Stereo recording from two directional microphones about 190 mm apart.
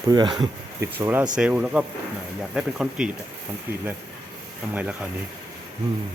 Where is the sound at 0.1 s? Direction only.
25° right (ahead or behind).